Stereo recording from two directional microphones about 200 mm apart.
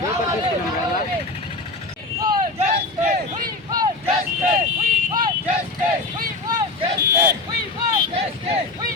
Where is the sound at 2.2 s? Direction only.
20° right (ahead or behind).